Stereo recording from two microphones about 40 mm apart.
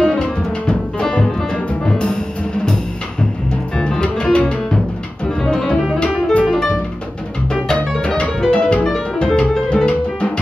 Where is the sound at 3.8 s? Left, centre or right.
Left.